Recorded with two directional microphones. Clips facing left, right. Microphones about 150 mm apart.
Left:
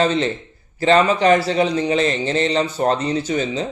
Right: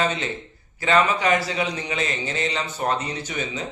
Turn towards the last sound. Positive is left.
turn(degrees=30)  # may be behind; listen again after turning